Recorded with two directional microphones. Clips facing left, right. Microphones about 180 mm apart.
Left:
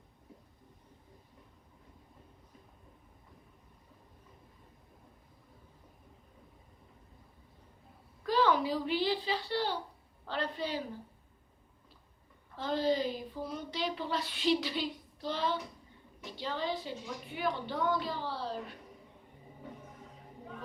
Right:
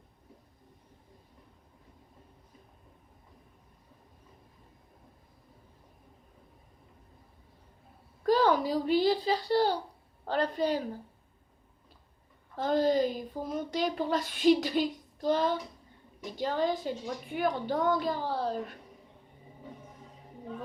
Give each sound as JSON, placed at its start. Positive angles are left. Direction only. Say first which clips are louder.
{"t": 8.2, "sound": "a woman's voice", "louder": "right 4 dB", "side_deg": -40}
{"t": 12.5, "sound": "a woman's voice", "louder": "right 5 dB", "side_deg": -45}